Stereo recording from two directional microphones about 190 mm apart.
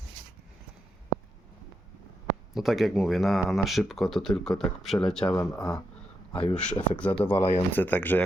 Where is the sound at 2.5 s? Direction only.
Centre (ahead or behind).